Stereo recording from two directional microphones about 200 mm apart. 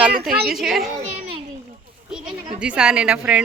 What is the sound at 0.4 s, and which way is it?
Speech, centre (ahead or behind).